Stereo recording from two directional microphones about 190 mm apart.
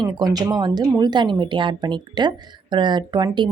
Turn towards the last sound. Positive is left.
turn(degrees=-25)  # may be behind; listen again after turning